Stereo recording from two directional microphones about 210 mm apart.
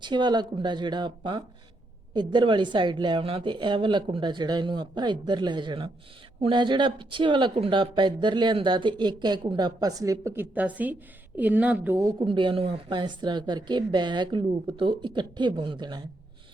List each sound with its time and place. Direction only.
0.0 s speech: 20° right (ahead or behind)